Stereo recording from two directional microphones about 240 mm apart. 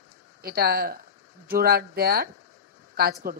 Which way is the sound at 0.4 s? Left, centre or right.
Right.